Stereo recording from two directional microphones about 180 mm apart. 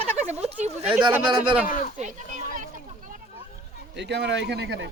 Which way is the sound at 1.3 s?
25° right (ahead or behind).